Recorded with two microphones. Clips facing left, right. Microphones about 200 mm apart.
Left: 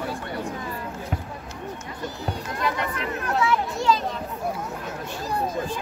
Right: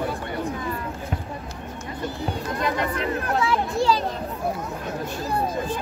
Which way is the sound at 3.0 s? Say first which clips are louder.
Right 2 dB; 35° right (ahead or behind).